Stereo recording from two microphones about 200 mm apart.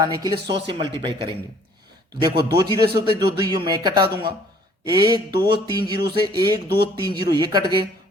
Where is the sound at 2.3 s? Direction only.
55° right (ahead or behind).